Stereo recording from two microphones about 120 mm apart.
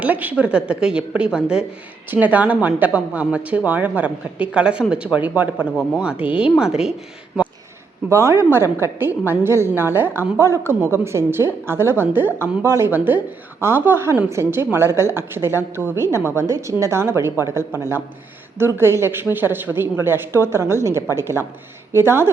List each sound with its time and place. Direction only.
0.0 s a woman's voice: 15° right (ahead or behind)
8.1 s a woman's voice: 25° right (ahead or behind)